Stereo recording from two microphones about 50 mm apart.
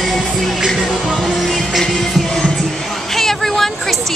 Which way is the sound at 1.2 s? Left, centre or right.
Centre.